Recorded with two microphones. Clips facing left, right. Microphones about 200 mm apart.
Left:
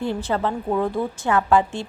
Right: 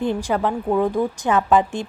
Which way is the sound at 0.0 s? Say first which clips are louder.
Right 2 dB; 15° right (ahead or behind).